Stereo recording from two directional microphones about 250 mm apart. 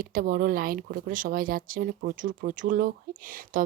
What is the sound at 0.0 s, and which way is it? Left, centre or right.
Speech, right.